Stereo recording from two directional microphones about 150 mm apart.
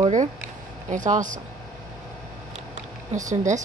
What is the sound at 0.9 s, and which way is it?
Speech, 55° right (ahead or behind).